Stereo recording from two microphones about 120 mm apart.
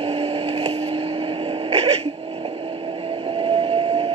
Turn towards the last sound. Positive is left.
turn(degrees=-55)  # may be behind; listen again after turning